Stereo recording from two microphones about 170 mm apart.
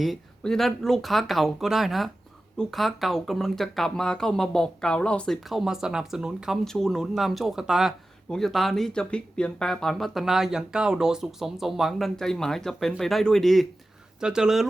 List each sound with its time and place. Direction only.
0.0 s speech: centre (ahead or behind)